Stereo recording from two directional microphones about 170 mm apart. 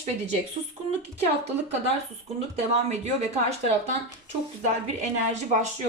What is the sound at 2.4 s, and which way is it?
Speech, 40° right (ahead or behind).